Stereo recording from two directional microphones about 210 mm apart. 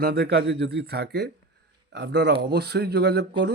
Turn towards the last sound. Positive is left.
turn(degrees=-50)  # may be behind; listen again after turning